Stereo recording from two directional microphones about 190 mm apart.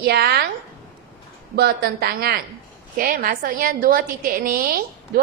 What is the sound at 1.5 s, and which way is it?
A woman's voice, 55° right (ahead or behind).